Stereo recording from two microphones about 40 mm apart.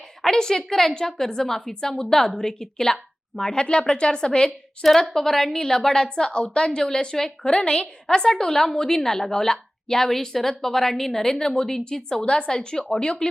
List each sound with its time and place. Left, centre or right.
0.2 s a woman's voice: centre
5.1 s a woman's voice: centre